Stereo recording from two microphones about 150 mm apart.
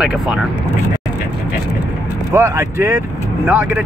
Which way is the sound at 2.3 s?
15° right (ahead or behind).